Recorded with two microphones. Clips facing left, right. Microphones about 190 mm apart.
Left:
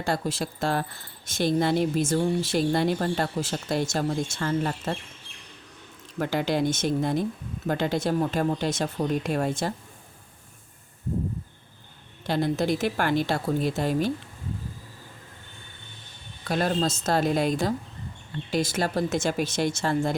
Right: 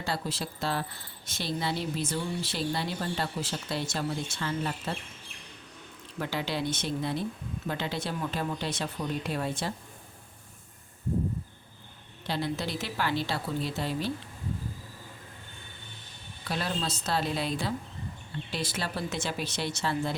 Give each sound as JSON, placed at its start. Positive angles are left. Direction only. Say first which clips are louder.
{"t": 0.0, "sound": "speech", "louder": "left 6 dB", "side_deg": 50}
{"t": 6.1, "sound": "speech", "louder": "left 7 dB", "side_deg": 50}
{"t": 12.3, "sound": "speech", "louder": "left 7 dB", "side_deg": 45}
{"t": 16.5, "sound": "speech", "louder": "left 7 dB", "side_deg": 50}